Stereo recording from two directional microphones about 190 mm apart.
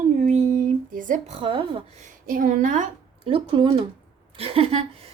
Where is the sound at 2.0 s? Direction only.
45° right (ahead or behind).